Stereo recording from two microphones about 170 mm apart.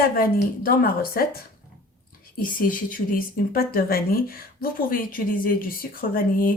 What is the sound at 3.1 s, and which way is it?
A woman's voice, 60° left (ahead or behind).